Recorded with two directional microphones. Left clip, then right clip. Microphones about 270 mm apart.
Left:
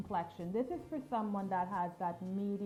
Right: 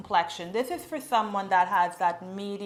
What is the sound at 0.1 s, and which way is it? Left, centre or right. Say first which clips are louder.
A woman's voice: right 13 dB; centre.